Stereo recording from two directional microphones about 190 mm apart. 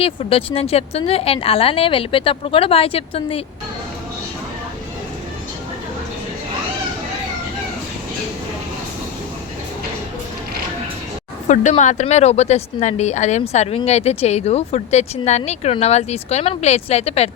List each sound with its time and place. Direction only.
0.0 s a woman's voice: 30° left (ahead or behind)
11.4 s a woman's voice: 40° left (ahead or behind)